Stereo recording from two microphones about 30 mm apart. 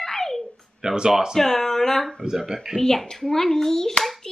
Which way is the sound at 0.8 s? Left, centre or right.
Right.